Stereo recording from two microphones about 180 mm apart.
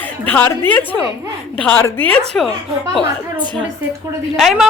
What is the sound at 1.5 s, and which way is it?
Speech, 5° left (ahead or behind).